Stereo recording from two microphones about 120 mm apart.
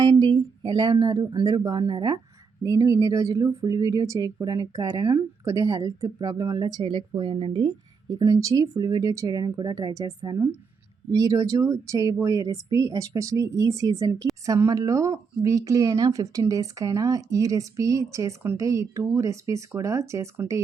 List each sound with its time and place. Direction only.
0.0 s speech: 35° right (ahead or behind)
8.1 s speech: 30° right (ahead or behind)